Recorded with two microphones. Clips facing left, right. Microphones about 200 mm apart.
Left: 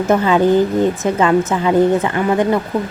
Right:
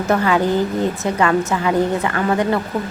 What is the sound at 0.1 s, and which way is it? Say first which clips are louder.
A woman's voice: left 4 dB; 20° left (ahead or behind).